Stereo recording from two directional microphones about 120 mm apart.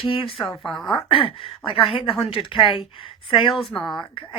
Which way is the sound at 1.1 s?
50° left (ahead or behind).